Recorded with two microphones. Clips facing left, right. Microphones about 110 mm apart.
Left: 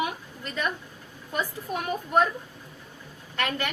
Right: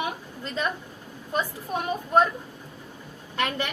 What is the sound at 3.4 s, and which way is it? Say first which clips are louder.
Speech: right 2 dB; 20° right (ahead or behind).